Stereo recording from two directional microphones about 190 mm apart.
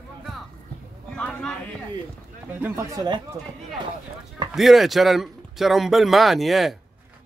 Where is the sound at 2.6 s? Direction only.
15° right (ahead or behind).